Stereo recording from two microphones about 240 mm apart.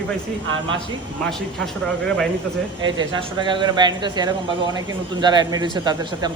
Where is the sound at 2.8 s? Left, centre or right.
Centre.